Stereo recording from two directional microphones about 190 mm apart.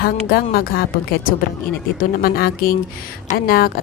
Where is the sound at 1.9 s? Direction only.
50° left (ahead or behind).